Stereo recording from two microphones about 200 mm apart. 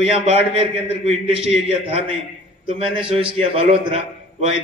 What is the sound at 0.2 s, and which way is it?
A man's voice, 30° right (ahead or behind).